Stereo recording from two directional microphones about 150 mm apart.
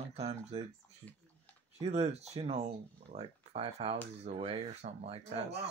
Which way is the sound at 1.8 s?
45° right (ahead or behind).